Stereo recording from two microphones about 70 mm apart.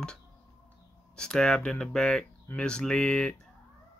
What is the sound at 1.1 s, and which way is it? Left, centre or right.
Speech, centre.